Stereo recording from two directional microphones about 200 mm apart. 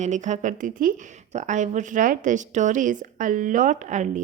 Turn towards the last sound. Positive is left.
turn(degrees=-35)  # may be behind; listen again after turning